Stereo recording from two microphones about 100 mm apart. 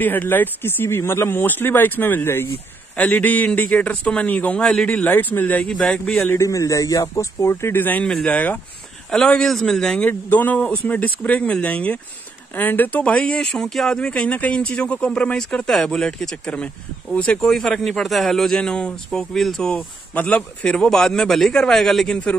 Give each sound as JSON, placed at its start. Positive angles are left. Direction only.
{"t": 0.0, "sound": "speech", "side_deg": 20}
{"t": 6.2, "sound": "a man's voice", "side_deg": 30}
{"t": 10.0, "sound": "speech", "side_deg": 15}